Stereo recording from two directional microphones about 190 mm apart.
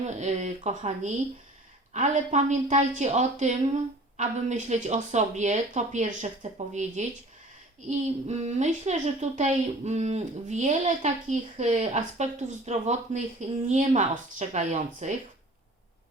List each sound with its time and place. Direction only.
0.0 s speech: 35° right (ahead or behind)